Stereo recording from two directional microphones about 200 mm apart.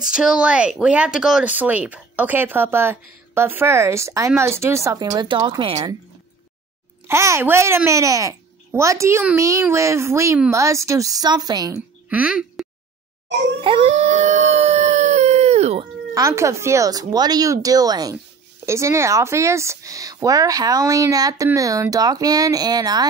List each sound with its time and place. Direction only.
0.0 s a child's voice: 5° right (ahead or behind); by 5.9 s 20° right (ahead or behind)
7.1 s a child's voice: 15° right (ahead or behind)
12.1 s speech: 5° right (ahead or behind)
13.6 s howl: 25° right (ahead or behind)
16.2 s a child's voice: 15° right (ahead or behind)